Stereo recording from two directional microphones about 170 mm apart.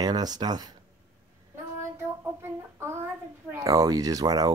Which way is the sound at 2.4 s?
15° right (ahead or behind).